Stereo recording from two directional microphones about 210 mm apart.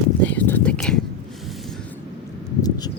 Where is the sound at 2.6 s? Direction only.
20° left (ahead or behind).